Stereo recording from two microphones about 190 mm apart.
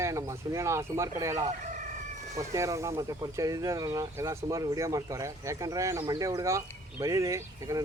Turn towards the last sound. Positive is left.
turn(degrees=-15)  # may be behind; listen again after turning